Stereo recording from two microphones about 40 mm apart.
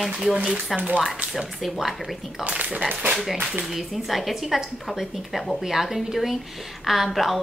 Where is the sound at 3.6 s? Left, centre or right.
Centre.